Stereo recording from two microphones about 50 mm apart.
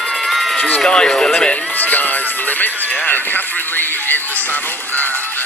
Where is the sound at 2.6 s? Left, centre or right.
Left.